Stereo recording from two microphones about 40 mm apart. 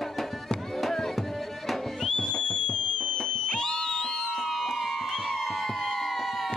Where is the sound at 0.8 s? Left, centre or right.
Centre.